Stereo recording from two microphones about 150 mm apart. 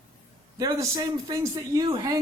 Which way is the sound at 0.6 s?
25° right (ahead or behind).